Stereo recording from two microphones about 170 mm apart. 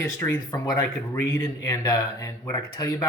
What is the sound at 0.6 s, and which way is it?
Speech, 20° left (ahead or behind).